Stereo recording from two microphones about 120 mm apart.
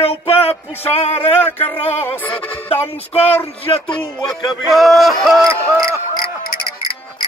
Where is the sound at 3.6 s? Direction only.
45° left (ahead or behind).